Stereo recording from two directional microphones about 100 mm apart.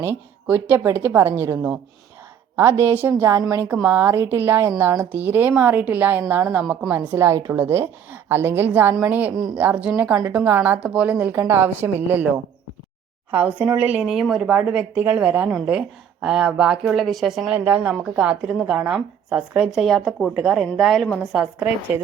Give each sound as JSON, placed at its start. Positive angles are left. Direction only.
{"t": 0.4, "sound": "a woman's voice", "side_deg": -20}
{"t": 11.3, "sound": "a woman's voice", "side_deg": -25}
{"t": 13.3, "sound": "a woman's voice", "side_deg": -15}
{"t": 17.5, "sound": "a woman's voice", "side_deg": -15}
{"t": 21.3, "sound": "speech", "side_deg": -10}